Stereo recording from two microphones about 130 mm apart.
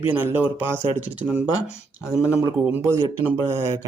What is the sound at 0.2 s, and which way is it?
Speech, 15° right (ahead or behind).